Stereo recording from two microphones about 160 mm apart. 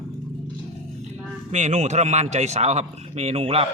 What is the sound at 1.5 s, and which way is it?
A man's voice, 45° right (ahead or behind).